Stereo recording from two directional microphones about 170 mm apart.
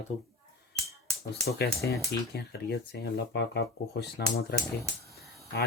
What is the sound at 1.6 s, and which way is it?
Speech, 70° left (ahead or behind).